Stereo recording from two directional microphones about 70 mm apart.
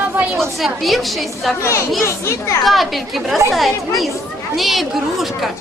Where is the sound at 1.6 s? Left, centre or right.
Left.